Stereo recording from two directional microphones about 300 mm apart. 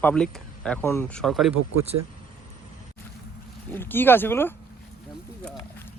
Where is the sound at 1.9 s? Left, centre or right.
Right.